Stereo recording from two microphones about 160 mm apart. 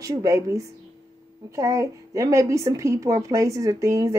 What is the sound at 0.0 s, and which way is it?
A woman's voice, 20° right (ahead or behind).